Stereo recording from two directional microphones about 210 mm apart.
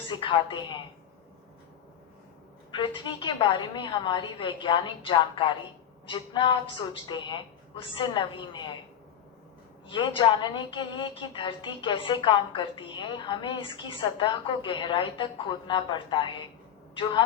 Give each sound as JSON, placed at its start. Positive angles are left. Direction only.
{"t": 0.1, "sound": "speech", "side_deg": 25}
{"t": 2.7, "sound": "speech", "side_deg": 20}
{"t": 9.9, "sound": "speech", "side_deg": 25}